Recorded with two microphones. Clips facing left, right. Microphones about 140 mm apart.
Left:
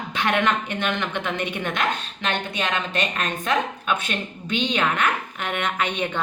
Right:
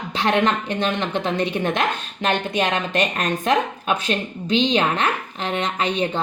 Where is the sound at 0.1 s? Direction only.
35° right (ahead or behind).